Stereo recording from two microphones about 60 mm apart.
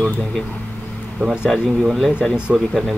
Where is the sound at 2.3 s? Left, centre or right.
Centre.